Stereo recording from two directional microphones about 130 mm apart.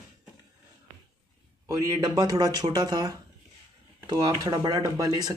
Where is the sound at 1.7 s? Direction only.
25° right (ahead or behind).